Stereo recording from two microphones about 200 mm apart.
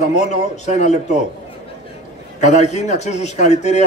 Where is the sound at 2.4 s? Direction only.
35° left (ahead or behind).